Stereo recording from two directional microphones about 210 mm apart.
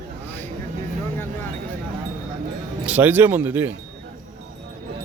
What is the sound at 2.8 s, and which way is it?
Speech, 5° right (ahead or behind).